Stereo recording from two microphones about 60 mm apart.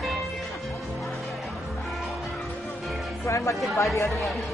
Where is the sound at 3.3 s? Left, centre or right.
Left.